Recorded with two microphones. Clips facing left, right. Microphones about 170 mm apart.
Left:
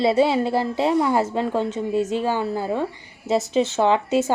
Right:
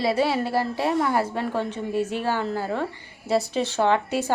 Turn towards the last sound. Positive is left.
turn(degrees=20)  # may be behind; listen again after turning